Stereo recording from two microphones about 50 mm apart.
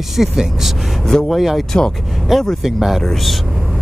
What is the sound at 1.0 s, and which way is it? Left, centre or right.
Speech, centre.